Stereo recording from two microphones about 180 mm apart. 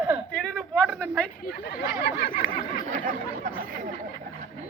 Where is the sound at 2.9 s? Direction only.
45° right (ahead or behind).